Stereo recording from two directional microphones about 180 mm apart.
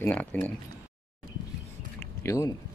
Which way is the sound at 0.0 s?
10° left (ahead or behind).